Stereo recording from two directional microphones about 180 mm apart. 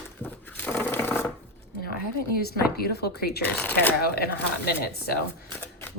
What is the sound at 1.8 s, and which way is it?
Speech, 55° left (ahead or behind).